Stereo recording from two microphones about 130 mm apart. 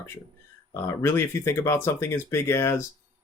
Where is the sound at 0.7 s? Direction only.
20° left (ahead or behind).